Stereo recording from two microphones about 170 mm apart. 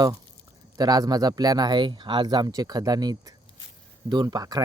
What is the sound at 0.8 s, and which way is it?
Speech, 20° right (ahead or behind).